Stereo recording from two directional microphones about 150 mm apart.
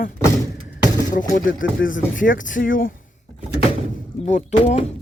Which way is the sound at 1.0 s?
60° left (ahead or behind).